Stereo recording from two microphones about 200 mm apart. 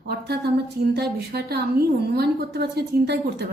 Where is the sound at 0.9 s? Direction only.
55° right (ahead or behind).